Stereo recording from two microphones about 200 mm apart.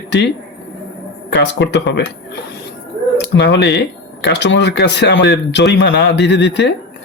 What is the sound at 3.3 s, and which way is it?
Speech, 60° left (ahead or behind).